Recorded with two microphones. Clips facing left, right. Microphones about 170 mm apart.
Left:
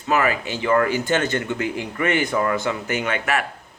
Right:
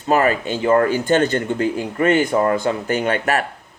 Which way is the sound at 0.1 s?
35° right (ahead or behind).